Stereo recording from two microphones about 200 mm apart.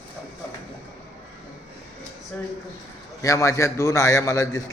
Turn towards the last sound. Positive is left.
turn(degrees=15)  # may be behind; listen again after turning